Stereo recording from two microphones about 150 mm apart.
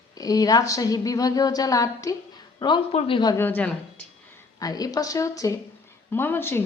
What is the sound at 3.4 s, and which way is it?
Speech, 10° left (ahead or behind).